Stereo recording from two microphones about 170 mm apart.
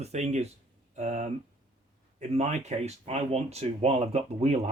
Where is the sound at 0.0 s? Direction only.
40° right (ahead or behind).